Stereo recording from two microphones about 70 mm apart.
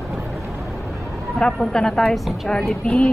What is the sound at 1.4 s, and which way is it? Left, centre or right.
A woman's voice, centre.